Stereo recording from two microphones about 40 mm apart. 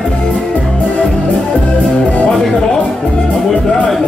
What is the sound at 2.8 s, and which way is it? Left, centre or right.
Music, centre.